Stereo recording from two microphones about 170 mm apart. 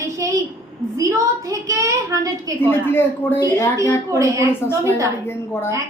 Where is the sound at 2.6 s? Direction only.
15° left (ahead or behind).